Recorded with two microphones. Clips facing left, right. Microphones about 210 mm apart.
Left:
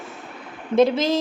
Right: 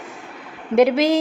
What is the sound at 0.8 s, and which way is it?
Speech, 15° right (ahead or behind).